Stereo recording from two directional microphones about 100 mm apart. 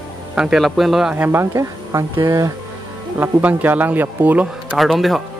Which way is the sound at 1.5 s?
35° right (ahead or behind).